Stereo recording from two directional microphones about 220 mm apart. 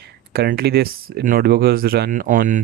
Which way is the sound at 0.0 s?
45° right (ahead or behind).